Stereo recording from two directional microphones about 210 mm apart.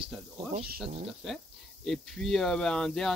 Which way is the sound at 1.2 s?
Centre (ahead or behind).